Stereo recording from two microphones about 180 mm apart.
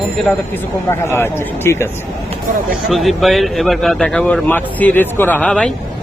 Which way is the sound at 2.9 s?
Centre (ahead or behind).